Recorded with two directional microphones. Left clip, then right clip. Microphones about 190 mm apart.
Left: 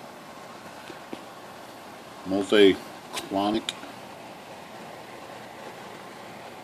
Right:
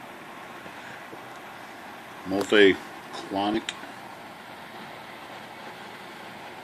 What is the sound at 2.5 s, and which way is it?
Speech, 15° left (ahead or behind).